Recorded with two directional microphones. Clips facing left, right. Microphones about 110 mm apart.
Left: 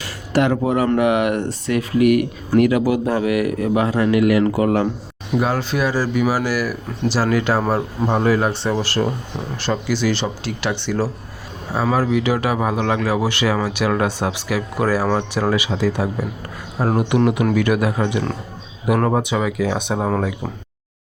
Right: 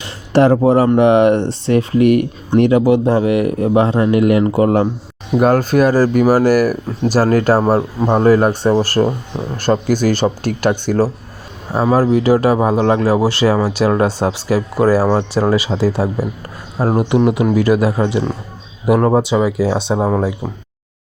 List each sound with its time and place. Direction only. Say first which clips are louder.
0.0 s a sound: right 6 dB; 35° right (ahead or behind)
0.9 s speech: right 7 dB; 30° right (ahead or behind)
5.4 s speech: right 8 dB; 50° right (ahead or behind)
11.7 s speech: right 5 dB; 20° right (ahead or behind)
11.9 s speech: right 8 dB; 40° right (ahead or behind); by 17.5 s 20° right (ahead or behind)
17.5 s speech: right 4 dB; 30° right (ahead or behind)